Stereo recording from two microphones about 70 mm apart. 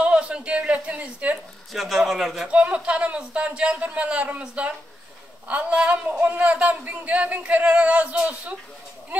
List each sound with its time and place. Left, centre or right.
0.0 s a sound: centre
1.7 s speech: centre
2.4 s a man's voice: centre